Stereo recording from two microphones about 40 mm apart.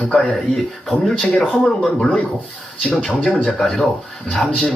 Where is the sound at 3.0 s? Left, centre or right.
Centre.